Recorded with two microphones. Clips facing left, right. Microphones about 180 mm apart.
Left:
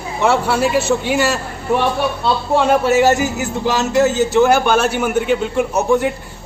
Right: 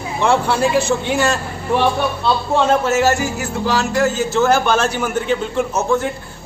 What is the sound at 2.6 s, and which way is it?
A man's voice, 15° left (ahead or behind).